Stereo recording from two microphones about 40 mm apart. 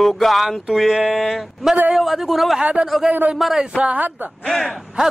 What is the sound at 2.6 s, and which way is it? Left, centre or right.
Speech, right.